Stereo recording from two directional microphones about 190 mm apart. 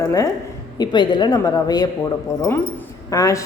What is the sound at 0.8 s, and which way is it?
A woman's voice, 25° left (ahead or behind).